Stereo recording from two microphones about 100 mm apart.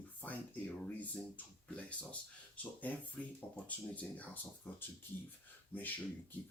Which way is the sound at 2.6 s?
15° left (ahead or behind).